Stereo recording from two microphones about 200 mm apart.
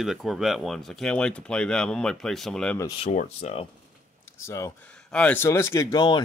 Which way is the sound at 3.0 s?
35° left (ahead or behind).